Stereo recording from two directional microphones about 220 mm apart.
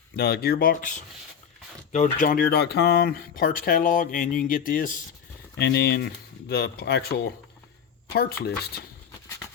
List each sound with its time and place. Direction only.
0.2 s speech: 45° left (ahead or behind)